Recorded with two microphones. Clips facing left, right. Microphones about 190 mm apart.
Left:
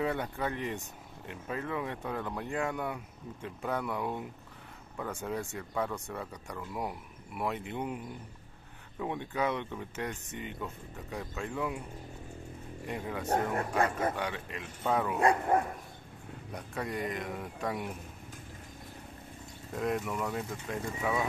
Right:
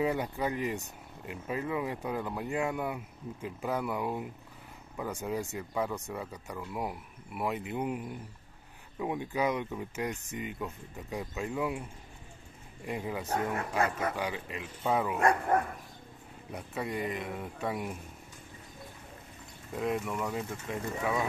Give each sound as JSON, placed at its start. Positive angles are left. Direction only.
{"t": 0.0, "sound": "speech", "side_deg": -10}
{"t": 9.0, "sound": "speech", "side_deg": -10}
{"t": 12.8, "sound": "speech", "side_deg": -5}
{"t": 13.3, "sound": "speech", "side_deg": 35}
{"t": 14.1, "sound": "speech", "side_deg": -5}
{"t": 16.5, "sound": "speech", "side_deg": -5}
{"t": 19.7, "sound": "speech", "side_deg": 0}